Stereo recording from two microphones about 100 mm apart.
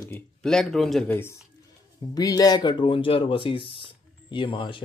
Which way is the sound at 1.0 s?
20° left (ahead or behind).